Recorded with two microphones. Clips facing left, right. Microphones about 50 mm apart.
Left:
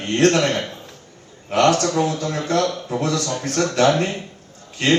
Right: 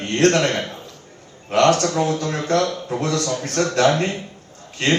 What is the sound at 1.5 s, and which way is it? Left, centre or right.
A man's voice, right.